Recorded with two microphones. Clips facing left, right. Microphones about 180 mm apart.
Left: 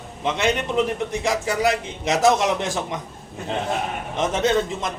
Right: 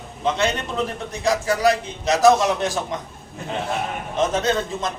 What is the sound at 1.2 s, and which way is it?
A man's voice, 20° left (ahead or behind).